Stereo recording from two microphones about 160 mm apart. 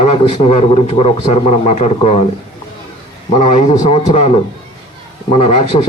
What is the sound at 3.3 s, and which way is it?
A man's voice, 50° left (ahead or behind).